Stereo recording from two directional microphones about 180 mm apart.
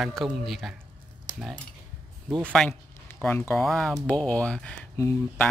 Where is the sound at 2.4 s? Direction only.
5° left (ahead or behind).